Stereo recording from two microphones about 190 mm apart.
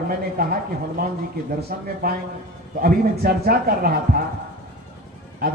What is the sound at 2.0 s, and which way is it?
A woman's voice, 55° right (ahead or behind).